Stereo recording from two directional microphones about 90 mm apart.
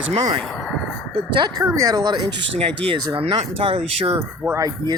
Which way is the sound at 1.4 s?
50° right (ahead or behind).